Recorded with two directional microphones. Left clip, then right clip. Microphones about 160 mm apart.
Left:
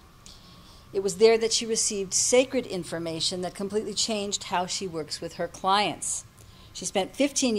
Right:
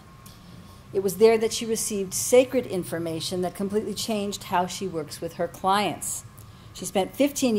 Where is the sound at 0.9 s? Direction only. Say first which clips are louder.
Right 1 dB; 50° right (ahead or behind).